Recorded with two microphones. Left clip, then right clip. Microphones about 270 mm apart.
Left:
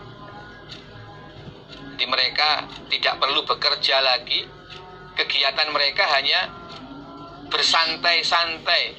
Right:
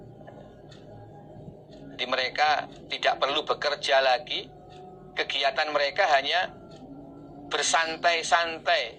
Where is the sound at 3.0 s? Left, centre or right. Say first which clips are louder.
Left 3 dB; right.